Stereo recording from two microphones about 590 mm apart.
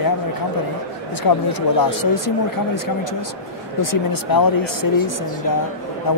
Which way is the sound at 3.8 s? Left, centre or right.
Left.